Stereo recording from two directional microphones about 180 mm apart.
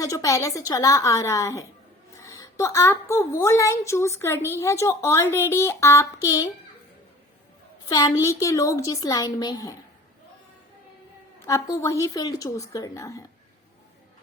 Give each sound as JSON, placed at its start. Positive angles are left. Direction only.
{"t": 0.0, "sound": "a woman's voice", "side_deg": 20}
{"t": 7.9, "sound": "a woman's voice", "side_deg": 20}
{"t": 11.3, "sound": "a woman's voice", "side_deg": 20}